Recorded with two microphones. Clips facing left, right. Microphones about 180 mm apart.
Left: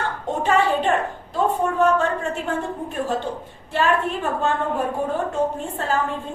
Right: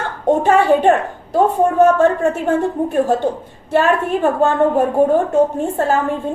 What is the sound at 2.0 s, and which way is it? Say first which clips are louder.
A woman's voice: right 9 dB; 45° right (ahead or behind).